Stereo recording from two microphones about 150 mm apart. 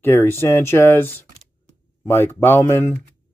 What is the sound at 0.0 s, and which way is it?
Speech, 15° left (ahead or behind).